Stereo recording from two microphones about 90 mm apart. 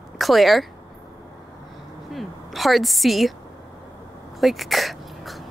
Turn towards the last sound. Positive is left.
turn(degrees=0)  # may be behind; listen again after turning